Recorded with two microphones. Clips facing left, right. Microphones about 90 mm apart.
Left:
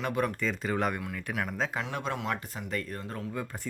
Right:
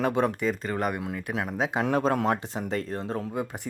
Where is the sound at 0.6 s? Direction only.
5° right (ahead or behind).